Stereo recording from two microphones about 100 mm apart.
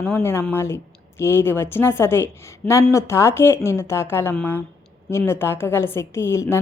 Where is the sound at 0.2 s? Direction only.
25° left (ahead or behind).